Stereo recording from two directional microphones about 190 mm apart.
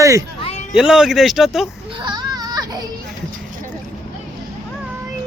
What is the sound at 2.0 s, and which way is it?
Baby cry, 20° right (ahead or behind).